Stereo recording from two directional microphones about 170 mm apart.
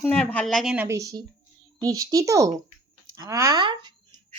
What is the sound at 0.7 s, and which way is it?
A woman's voice, 15° right (ahead or behind).